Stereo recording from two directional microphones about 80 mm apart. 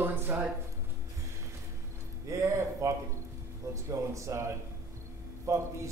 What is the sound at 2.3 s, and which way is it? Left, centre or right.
Speech, right.